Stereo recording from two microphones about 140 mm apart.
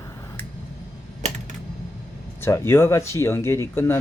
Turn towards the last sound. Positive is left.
turn(degrees=15)  # may be behind; listen again after turning